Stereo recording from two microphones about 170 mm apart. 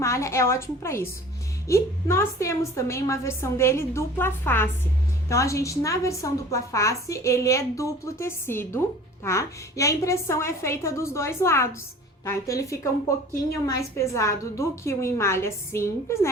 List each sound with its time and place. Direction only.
0.0 s a woman's voice: 15° left (ahead or behind)